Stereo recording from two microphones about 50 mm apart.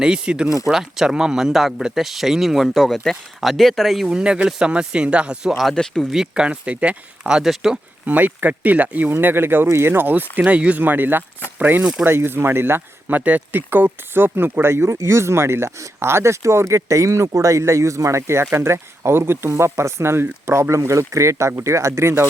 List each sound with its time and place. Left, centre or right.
0.0 s speech: centre
4.1 s speech: centre
4.7 s speech: right
5.7 s speech: centre
6.3 s speech: right
7.4 s speech: centre
8.0 s speech: right
9.0 s speech: right
9.6 s speech: right
10.3 s speech: right
10.8 s speech: right
13.1 s speech: right